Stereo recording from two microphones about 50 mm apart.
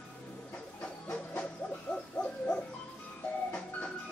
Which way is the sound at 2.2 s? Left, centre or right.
Left.